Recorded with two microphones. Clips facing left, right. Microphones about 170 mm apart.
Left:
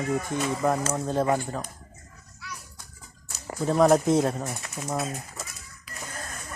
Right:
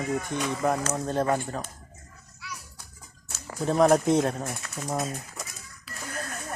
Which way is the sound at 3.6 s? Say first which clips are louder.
Left 1 dB; centre (ahead or behind).